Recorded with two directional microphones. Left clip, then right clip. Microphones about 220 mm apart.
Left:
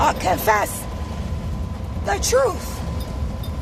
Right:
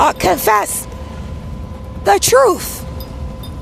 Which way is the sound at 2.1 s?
45° right (ahead or behind).